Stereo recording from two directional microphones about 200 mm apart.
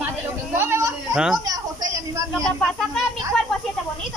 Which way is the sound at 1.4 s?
20° right (ahead or behind).